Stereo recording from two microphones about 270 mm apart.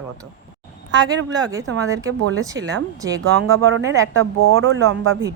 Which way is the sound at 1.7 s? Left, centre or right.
Right.